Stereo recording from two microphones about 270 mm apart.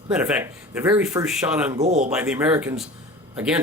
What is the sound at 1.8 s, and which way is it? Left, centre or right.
Speech, right.